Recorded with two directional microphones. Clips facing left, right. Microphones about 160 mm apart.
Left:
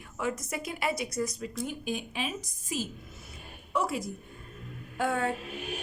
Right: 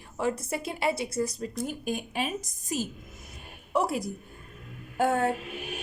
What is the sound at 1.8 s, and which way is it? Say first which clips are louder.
Speech: right 3 dB; 45° right (ahead or behind).